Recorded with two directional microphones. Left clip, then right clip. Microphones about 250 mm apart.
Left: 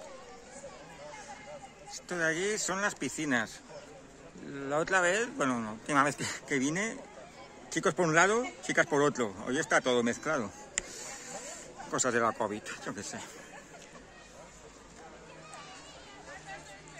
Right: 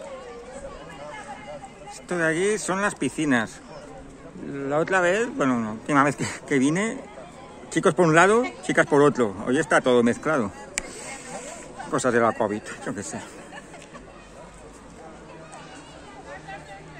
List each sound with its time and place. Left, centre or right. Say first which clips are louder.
2.0 s speech: right 8 dB; centre
11.9 s speech: right 8 dB; centre